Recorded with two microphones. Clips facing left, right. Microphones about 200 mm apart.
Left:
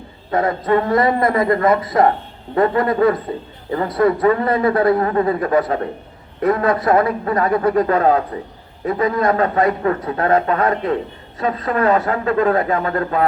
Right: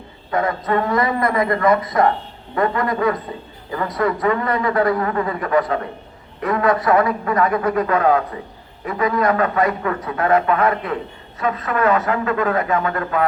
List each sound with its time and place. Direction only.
0.3 s a man's voice: 30° left (ahead or behind)